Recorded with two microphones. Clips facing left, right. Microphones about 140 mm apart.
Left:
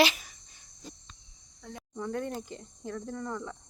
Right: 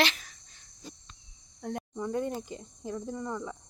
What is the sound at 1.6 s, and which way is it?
Cricket, 55° right (ahead or behind).